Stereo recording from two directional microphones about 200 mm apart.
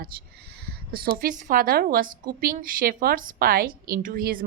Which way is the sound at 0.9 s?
50° right (ahead or behind).